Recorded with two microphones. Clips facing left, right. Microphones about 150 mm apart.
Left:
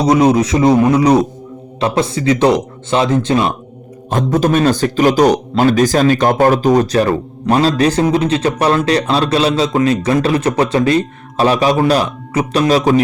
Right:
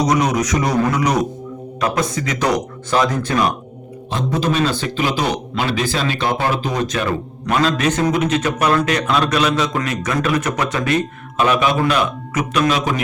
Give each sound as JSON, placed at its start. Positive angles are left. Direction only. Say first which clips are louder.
{"t": 0.0, "sound": "speech", "louder": "left 6 dB", "side_deg": 30}
{"t": 4.1, "sound": "speech", "louder": "left 6 dB", "side_deg": 45}